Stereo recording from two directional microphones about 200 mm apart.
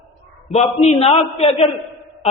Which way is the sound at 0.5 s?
30° left (ahead or behind).